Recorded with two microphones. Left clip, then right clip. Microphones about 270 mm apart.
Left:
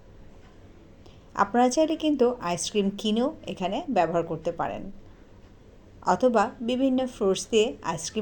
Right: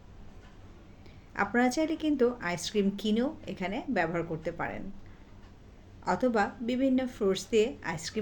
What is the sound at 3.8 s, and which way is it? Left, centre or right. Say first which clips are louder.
Speech: left 7 dB; centre.